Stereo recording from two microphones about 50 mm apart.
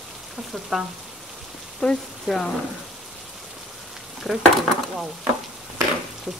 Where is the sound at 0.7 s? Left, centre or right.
Centre.